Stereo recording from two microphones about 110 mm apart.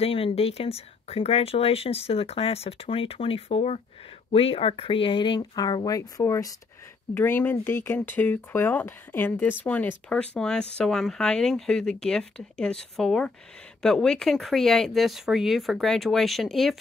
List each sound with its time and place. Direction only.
0.0 s speech: 60° left (ahead or behind); by 6.5 s 30° left (ahead or behind)
7.2 s speech: 20° left (ahead or behind); by 16.7 s centre (ahead or behind)